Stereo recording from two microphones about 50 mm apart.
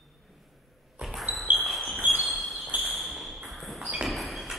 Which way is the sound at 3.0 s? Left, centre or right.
Centre.